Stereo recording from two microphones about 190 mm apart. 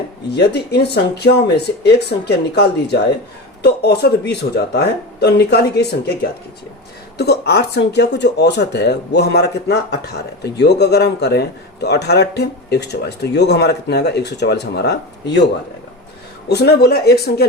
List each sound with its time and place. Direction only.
0.3 s a man's voice: 60° left (ahead or behind)
7.2 s a man's voice: 60° left (ahead or behind)
16.5 s a man's voice: 60° left (ahead or behind)